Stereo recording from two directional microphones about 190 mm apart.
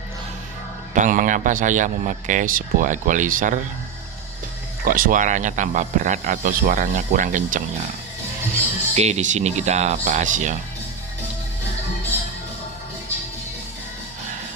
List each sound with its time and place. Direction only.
0.9 s speech: 45° right (ahead or behind)
4.9 s speech: 45° right (ahead or behind)
9.0 s speech: 35° right (ahead or behind)